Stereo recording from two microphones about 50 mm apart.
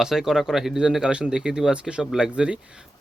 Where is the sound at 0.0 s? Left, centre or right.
Centre.